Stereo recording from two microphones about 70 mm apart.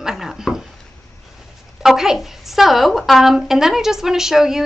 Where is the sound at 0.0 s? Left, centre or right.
Centre.